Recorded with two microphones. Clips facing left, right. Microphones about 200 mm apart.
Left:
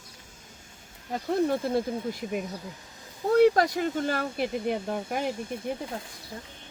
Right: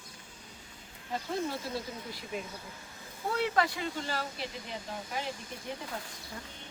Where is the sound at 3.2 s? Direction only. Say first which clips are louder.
Left 10 dB; 40° left (ahead or behind); by 5.3 s 60° left (ahead or behind).